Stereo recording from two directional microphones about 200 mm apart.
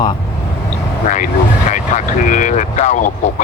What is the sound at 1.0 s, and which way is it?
Speech, 40° left (ahead or behind).